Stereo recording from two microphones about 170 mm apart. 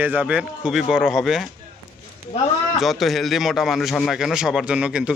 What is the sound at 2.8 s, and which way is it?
A man's voice, centre (ahead or behind).